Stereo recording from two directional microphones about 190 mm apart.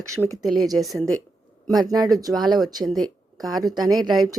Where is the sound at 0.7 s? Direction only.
Centre (ahead or behind).